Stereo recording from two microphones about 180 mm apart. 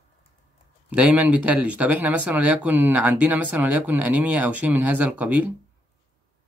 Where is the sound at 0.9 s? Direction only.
5° right (ahead or behind).